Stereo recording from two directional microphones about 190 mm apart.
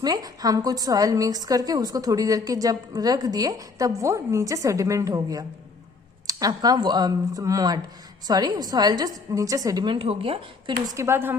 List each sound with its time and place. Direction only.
0.0 s a woman's voice: 20° right (ahead or behind)
10.9 s speech: 15° right (ahead or behind)